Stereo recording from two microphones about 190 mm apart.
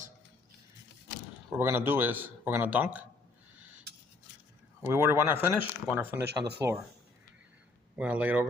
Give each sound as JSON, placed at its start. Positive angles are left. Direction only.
{"t": 1.5, "sound": "speech", "side_deg": -10}
{"t": 4.8, "sound": "speech", "side_deg": -15}
{"t": 7.9, "sound": "speech", "side_deg": -5}